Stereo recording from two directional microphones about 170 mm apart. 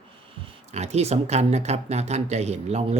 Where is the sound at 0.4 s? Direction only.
40° right (ahead or behind).